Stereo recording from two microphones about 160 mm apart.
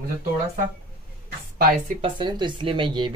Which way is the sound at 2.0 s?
30° right (ahead or behind).